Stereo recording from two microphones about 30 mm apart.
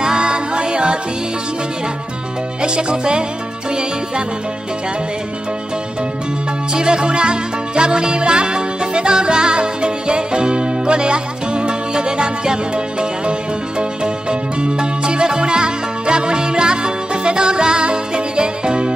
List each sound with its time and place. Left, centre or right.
0.0 s music: right
2.6 s music: right
6.7 s music: right